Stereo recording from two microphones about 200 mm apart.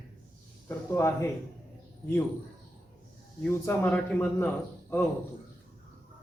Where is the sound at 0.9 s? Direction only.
15° left (ahead or behind).